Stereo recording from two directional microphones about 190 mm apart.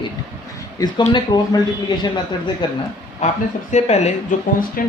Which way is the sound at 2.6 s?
25° left (ahead or behind).